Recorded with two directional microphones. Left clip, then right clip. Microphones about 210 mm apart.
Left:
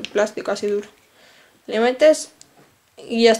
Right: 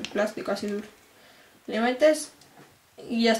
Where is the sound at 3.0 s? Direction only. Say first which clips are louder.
Left 10 dB; 5° right (ahead or behind).